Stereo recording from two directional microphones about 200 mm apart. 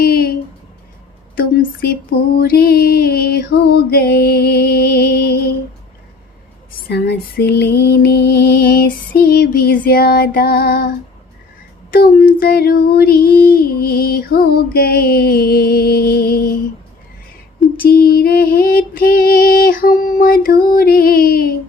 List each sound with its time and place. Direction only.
0.0 s a sound: 50° left (ahead or behind)
1.4 s child singing: 50° left (ahead or behind)
6.8 s child singing: 50° left (ahead or behind)
17.7 s child singing: 50° left (ahead or behind)